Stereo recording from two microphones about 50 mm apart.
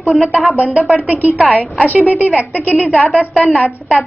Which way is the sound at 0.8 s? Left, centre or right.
Centre.